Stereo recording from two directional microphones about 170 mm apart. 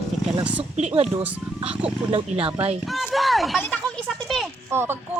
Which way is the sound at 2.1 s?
35° right (ahead or behind).